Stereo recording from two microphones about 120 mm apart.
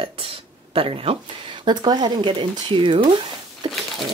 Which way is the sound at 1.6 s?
40° right (ahead or behind).